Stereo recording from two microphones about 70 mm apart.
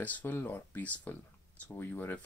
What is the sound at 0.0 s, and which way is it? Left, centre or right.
Speech, left.